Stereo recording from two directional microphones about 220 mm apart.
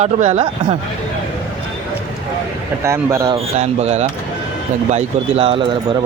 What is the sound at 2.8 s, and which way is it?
Speech, 15° right (ahead or behind).